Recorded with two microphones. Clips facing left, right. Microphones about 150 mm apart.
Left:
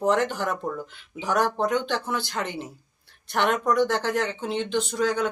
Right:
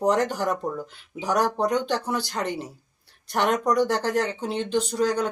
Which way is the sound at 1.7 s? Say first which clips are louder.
Right 1 dB; 40° right (ahead or behind).